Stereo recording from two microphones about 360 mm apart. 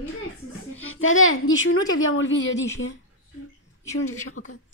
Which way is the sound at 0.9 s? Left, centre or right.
Left.